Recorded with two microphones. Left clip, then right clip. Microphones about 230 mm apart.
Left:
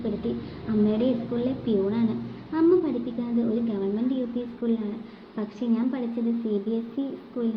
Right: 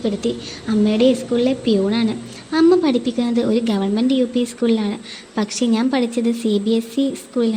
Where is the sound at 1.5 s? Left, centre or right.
Right.